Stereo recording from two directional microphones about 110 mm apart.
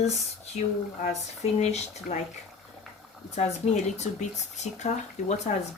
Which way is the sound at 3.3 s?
90° left.